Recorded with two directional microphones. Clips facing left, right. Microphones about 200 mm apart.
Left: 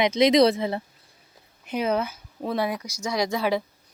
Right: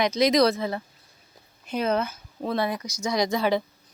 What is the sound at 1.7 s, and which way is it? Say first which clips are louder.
Speech: even; 15° left (ahead or behind).